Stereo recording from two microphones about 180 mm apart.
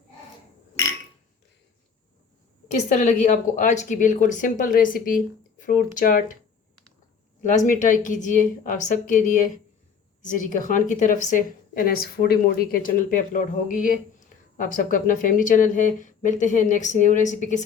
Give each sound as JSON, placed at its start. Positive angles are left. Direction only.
{"t": 2.6, "sound": "a woman's voice", "side_deg": 40}
{"t": 7.7, "sound": "a woman's voice", "side_deg": 45}